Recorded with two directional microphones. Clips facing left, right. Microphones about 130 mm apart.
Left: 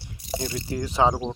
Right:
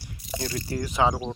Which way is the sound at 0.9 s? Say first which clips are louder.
Left 2 dB; 30° left (ahead or behind).